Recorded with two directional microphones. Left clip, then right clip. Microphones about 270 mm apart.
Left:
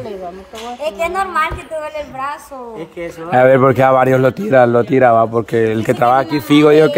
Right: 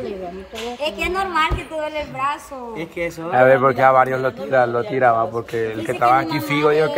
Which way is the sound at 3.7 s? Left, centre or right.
Left.